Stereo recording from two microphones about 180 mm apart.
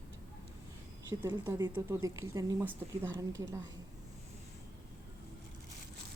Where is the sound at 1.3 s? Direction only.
25° right (ahead or behind).